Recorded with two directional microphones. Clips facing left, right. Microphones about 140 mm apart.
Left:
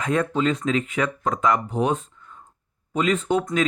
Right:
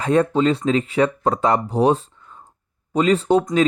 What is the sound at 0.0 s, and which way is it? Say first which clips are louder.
Speech: right 5 dB; 35° right (ahead or behind).